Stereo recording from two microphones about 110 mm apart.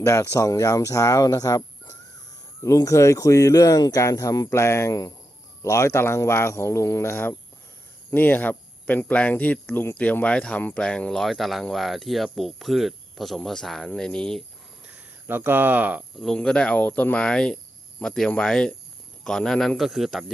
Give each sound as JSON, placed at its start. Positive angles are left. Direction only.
{"t": 0.0, "sound": "speech", "side_deg": 30}
{"t": 15.3, "sound": "speech", "side_deg": -20}
{"t": 16.1, "sound": "a man's voice", "side_deg": 5}